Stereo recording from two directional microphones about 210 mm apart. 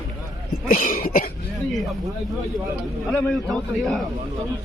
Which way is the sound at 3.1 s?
5° left (ahead or behind).